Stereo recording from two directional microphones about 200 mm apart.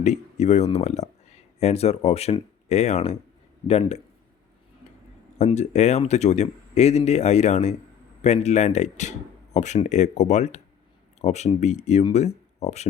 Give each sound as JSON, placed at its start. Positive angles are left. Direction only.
{"t": 0.0, "sound": "speech", "side_deg": 35}
{"t": 5.4, "sound": "speech", "side_deg": 35}